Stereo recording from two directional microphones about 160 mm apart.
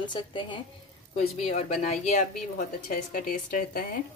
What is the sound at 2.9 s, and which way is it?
Speech, 60° left (ahead or behind).